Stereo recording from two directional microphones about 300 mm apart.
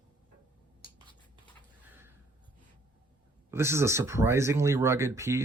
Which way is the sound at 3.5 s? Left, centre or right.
Centre.